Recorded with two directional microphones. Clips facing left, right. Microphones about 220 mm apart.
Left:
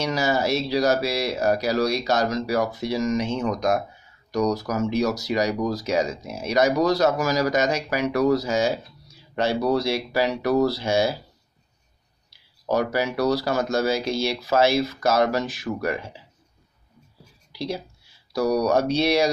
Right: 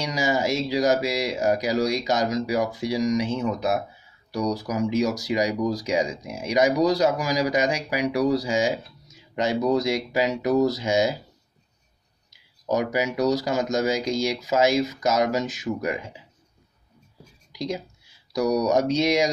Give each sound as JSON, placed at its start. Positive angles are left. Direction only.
{"t": 0.0, "sound": "speech", "side_deg": -15}
{"t": 12.3, "sound": "speech", "side_deg": -20}
{"t": 17.5, "sound": "speech", "side_deg": -15}
{"t": 18.4, "sound": "speech", "side_deg": 30}
{"t": 18.7, "sound": "speech", "side_deg": -15}